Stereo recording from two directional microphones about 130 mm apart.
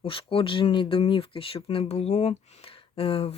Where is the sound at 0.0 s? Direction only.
45° left (ahead or behind).